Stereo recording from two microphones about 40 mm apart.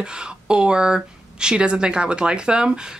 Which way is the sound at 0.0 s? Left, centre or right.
Right.